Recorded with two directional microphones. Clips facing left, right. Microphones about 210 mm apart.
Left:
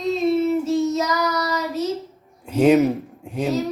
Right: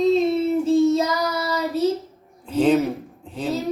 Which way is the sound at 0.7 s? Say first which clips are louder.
Right 3 dB; 30° right (ahead or behind).